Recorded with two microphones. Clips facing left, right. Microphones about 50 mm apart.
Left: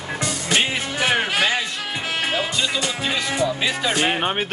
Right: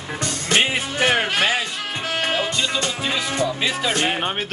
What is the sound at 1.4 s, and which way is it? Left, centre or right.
Music, centre.